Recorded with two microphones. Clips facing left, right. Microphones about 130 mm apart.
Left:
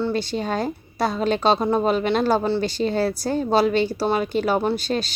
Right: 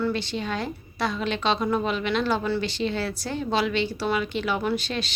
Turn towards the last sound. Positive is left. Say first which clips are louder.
# left 4 dB
turn(degrees=40)  # may be behind; listen again after turning